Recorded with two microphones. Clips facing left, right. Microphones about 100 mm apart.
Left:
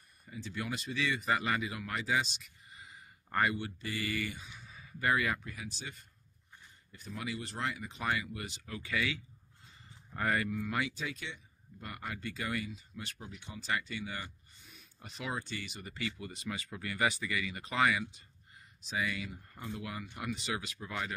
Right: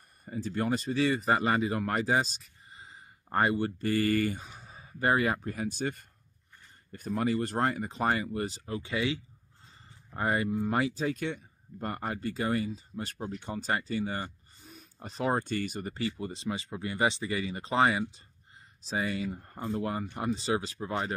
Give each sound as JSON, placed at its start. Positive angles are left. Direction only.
{"t": 0.2, "sound": "speech", "side_deg": -45}
{"t": 11.1, "sound": "speech", "side_deg": -50}